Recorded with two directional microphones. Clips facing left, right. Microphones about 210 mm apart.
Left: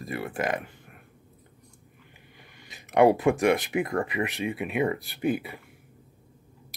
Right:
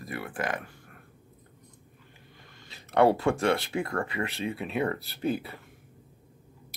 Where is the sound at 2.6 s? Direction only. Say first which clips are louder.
Left 3 dB; 15° left (ahead or behind).